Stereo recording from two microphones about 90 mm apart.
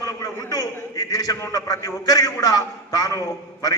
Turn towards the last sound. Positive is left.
turn(degrees=40)  # may be behind; listen again after turning